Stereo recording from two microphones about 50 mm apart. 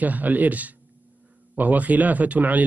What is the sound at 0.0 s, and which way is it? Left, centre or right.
Speech, right.